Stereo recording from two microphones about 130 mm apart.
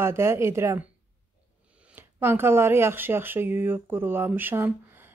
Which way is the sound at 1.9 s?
15° right (ahead or behind).